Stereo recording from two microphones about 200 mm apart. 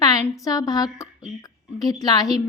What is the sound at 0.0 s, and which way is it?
A woman's voice, 20° left (ahead or behind).